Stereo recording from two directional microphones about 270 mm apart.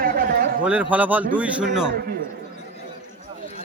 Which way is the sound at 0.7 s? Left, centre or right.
Centre.